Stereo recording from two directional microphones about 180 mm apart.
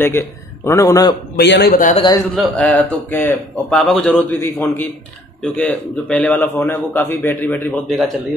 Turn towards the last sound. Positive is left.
turn(degrees=10)  # may be behind; listen again after turning